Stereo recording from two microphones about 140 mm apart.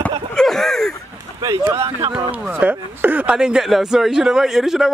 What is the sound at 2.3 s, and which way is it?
Speech, 10° right (ahead or behind).